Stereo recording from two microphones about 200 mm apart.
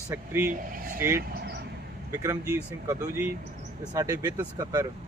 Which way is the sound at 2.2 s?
10° right (ahead or behind).